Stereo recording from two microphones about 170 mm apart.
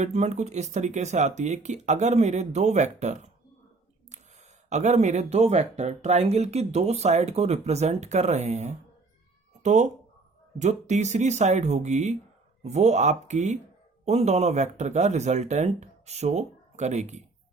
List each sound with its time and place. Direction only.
0.0 s speech: 40° right (ahead or behind)
4.7 s speech: 45° right (ahead or behind)